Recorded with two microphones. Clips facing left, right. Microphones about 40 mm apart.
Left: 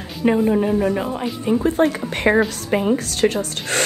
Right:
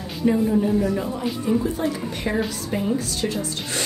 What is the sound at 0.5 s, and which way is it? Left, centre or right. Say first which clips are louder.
A woman's voice: left 3 dB; left.